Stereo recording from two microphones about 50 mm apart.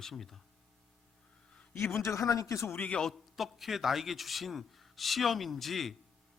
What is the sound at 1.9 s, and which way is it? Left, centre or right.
Speech, left.